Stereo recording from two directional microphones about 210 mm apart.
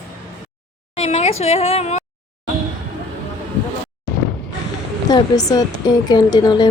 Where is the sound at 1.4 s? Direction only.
30° left (ahead or behind).